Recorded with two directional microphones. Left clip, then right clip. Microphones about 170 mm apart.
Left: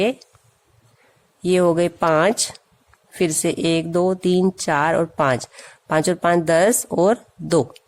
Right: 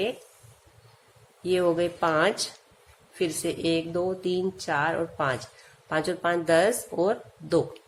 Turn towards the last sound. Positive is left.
turn(degrees=60)  # may be behind; listen again after turning